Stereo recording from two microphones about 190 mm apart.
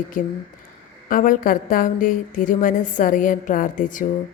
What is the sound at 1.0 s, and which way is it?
A woman's voice, 45° left (ahead or behind).